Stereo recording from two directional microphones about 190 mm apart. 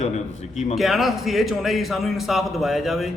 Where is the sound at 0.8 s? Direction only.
Centre (ahead or behind).